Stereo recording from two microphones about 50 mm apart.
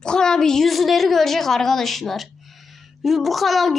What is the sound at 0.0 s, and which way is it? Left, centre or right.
A woman's voice, centre.